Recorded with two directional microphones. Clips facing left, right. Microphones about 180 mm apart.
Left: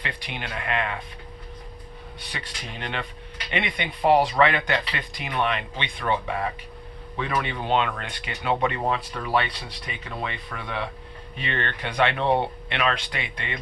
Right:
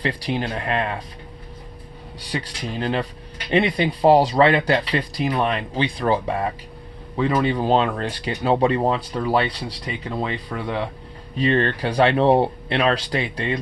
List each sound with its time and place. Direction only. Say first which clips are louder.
0.0 s speech: right 10 dB; 35° right (ahead or behind)
2.3 s speech: right 11 dB; 30° right (ahead or behind)